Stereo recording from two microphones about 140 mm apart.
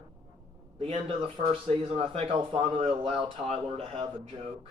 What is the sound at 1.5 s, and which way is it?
Speech, 45° right (ahead or behind).